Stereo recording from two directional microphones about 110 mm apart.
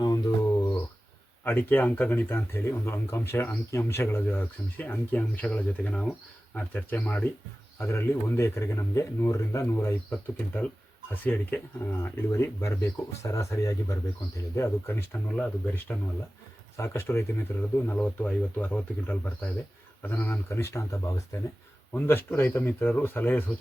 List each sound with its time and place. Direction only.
1.5 s a man's voice: 15° left (ahead or behind)
15.3 s a man's voice: 10° left (ahead or behind)